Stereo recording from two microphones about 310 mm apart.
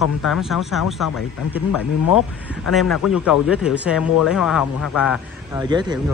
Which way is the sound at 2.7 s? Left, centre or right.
Centre.